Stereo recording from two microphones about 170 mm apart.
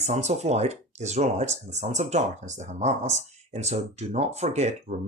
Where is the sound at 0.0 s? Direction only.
40° right (ahead or behind).